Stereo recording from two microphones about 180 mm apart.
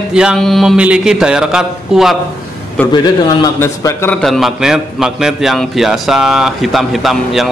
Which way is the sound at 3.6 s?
15° left (ahead or behind).